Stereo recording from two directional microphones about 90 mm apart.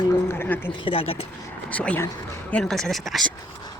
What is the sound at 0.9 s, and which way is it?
Speech, 90° left.